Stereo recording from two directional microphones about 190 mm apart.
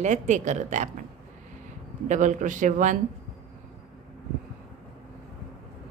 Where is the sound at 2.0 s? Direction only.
40° right (ahead or behind).